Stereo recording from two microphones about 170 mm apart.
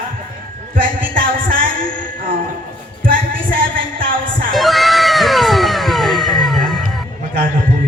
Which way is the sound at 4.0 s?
55° right (ahead or behind).